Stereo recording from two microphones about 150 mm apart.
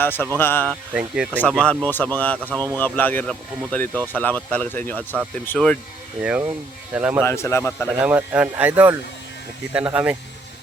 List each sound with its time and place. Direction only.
0.0 s speech: 15° left (ahead or behind)
0.7 s speech: 5° right (ahead or behind)
1.5 s speech: 5° left (ahead or behind)
6.9 s speech: 5° right (ahead or behind)
7.3 s speech: 15° left (ahead or behind)
7.9 s speech: 10° right (ahead or behind)